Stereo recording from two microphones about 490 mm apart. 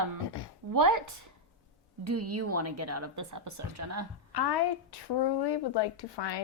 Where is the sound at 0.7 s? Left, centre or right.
Right.